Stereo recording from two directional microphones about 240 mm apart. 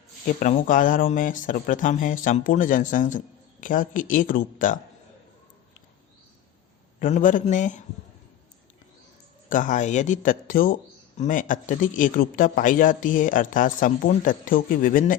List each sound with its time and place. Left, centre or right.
0.3 s speech: left
7.0 s speech: left
9.5 s speech: left